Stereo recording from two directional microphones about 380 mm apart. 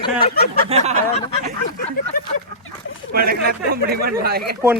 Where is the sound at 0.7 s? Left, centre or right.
Centre.